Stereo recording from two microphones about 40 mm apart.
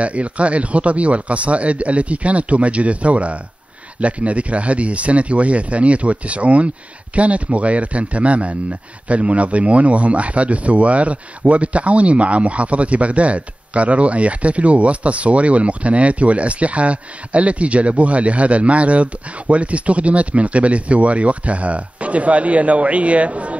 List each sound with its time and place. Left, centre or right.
0.0 s speech: right